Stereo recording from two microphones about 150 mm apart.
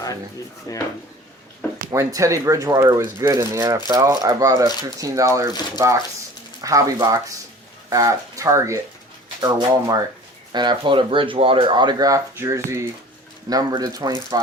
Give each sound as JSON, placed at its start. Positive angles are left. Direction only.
{"t": 0.7, "sound": "speech", "side_deg": 20}
{"t": 1.9, "sound": "speech", "side_deg": -20}